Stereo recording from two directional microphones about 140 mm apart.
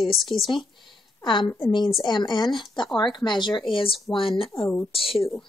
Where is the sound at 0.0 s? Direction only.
Centre (ahead or behind).